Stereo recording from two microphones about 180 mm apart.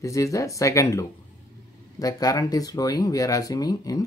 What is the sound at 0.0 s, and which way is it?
Speech, 15° left (ahead or behind).